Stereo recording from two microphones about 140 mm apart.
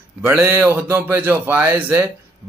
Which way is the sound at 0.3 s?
20° right (ahead or behind).